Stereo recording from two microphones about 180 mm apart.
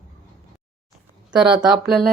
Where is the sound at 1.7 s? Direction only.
Centre (ahead or behind).